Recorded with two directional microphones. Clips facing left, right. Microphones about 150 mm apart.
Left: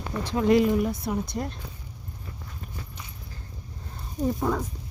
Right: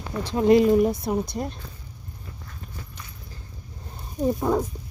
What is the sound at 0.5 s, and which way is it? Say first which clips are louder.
Speech: right 4 dB; 25° right (ahead or behind).